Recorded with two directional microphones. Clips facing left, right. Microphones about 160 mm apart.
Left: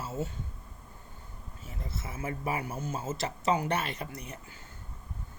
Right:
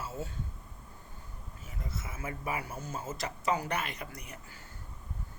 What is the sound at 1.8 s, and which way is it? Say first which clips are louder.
Speech: left 3 dB; 30° left (ahead or behind).